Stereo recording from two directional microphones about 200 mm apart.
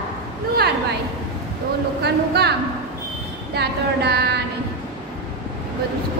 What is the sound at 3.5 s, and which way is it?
Child singing, 55° right (ahead or behind).